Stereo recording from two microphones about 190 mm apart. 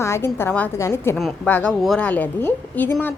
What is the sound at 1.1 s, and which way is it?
A woman's voice, 5° left (ahead or behind).